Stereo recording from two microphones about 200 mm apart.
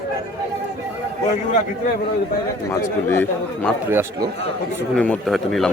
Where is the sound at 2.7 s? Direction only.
10° left (ahead or behind).